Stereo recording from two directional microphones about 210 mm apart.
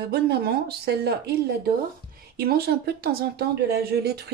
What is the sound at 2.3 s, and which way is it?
Speech, 50° right (ahead or behind).